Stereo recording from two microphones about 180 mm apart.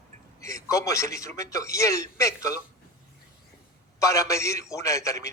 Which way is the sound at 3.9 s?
15° left (ahead or behind).